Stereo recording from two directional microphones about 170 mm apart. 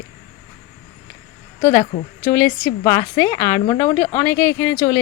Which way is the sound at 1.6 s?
10° left (ahead or behind).